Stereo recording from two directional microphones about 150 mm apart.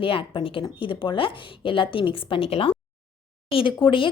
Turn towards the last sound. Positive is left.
turn(degrees=35)  # may be behind; listen again after turning